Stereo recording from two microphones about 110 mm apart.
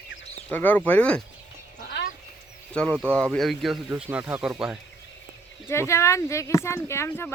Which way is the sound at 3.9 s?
15° right (ahead or behind).